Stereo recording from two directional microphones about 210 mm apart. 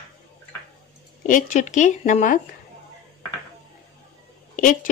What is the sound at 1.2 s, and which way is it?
Speech, 40° left (ahead or behind).